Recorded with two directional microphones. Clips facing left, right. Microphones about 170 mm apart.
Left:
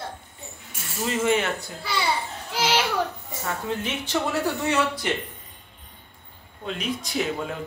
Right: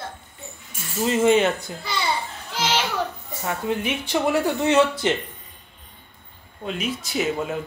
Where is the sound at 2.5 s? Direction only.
10° left (ahead or behind).